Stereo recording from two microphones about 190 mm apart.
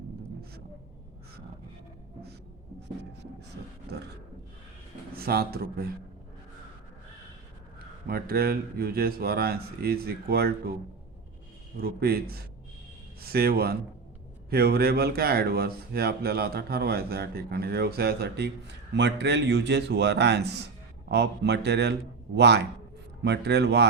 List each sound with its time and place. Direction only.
5.1 s speech: 55° right (ahead or behind)
8.0 s speech: 55° right (ahead or behind)
11.8 s speech: 55° right (ahead or behind)